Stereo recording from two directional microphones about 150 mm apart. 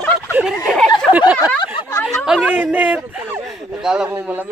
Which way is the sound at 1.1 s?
35° left (ahead or behind).